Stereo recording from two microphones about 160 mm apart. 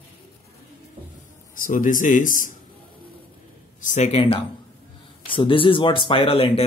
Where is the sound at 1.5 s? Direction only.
55° left (ahead or behind).